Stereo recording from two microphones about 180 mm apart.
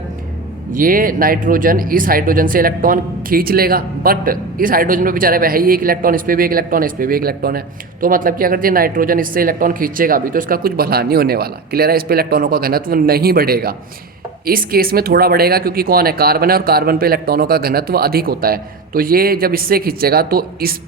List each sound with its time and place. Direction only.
0.7 s speech: 50° right (ahead or behind)